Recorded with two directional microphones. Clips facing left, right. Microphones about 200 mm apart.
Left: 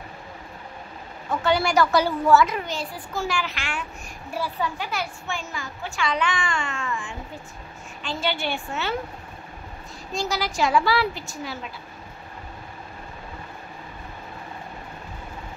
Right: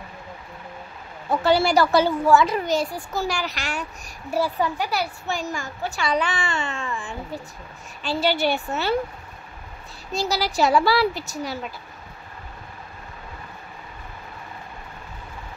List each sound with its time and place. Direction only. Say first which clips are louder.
1.3 s a child's voice: right 3 dB; 35° right (ahead or behind)
10.1 s a child's voice: right 3 dB; 35° right (ahead or behind)